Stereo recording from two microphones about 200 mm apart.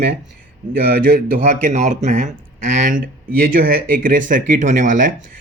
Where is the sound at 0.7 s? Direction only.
45° right (ahead or behind).